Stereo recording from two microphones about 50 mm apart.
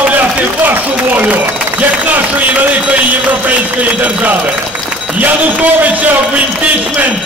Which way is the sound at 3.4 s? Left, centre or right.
Right.